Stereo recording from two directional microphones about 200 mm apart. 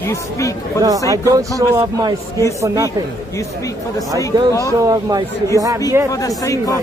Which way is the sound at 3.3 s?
15° left (ahead or behind).